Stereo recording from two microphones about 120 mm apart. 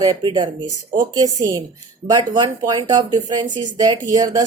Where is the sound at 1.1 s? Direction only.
30° right (ahead or behind).